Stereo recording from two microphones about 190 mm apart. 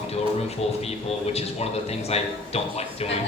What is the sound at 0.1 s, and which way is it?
Speech, 35° left (ahead or behind).